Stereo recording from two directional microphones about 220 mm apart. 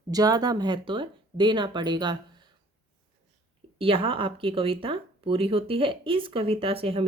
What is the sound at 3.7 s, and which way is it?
Speech, 25° right (ahead or behind).